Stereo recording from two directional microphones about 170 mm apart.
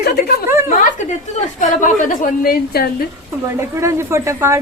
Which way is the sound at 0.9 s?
50° left (ahead or behind).